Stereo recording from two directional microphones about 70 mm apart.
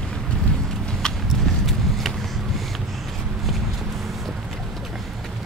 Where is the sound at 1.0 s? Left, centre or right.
Centre.